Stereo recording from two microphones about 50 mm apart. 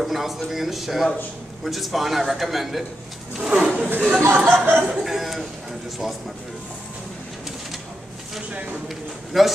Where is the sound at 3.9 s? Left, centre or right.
Right.